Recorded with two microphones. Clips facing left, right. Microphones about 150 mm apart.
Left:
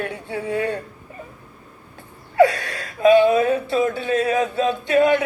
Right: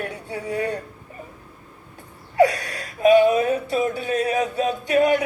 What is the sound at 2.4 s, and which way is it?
A man's voice, 25° left (ahead or behind).